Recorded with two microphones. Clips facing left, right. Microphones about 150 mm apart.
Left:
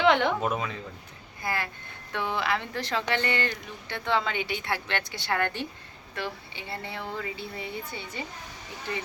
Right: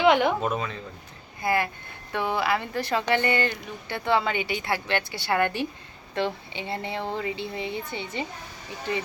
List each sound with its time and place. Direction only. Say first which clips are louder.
0.0 s speech: right 2 dB; 10° right (ahead or behind)
0.4 s speech: right 1 dB; 10° left (ahead or behind)
1.4 s a woman's voice: right 7 dB; 15° right (ahead or behind)
6.1 s speech: right 7 dB; 25° right (ahead or behind)